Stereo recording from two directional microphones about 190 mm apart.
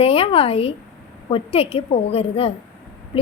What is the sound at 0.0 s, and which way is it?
A woman's voice, 30° left (ahead or behind).